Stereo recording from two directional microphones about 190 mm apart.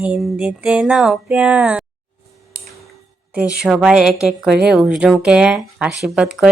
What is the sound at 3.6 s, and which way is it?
A woman's voice, 5° right (ahead or behind).